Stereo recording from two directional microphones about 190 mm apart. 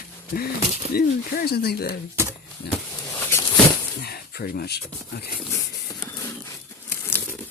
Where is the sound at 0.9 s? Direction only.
50° left (ahead or behind).